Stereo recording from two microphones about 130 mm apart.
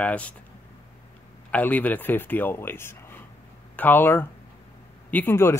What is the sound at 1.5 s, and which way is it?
Speech, 10° left (ahead or behind).